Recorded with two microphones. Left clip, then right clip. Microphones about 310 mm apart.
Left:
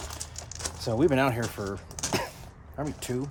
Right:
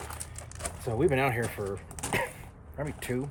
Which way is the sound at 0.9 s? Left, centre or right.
Centre.